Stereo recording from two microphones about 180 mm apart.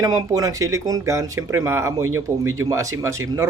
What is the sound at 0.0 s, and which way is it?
A man's voice, 20° right (ahead or behind).